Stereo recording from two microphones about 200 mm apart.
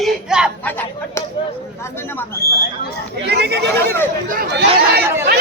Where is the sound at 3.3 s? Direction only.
55° right (ahead or behind).